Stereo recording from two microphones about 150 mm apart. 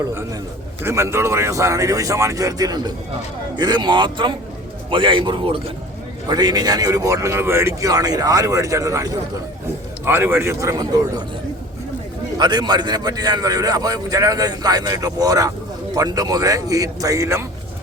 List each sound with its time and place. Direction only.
0.9 s a man's voice: 20° right (ahead or behind)
12.4 s a man's voice: 30° right (ahead or behind)